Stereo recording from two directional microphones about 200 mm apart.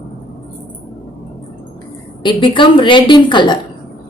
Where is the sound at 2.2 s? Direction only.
25° left (ahead or behind).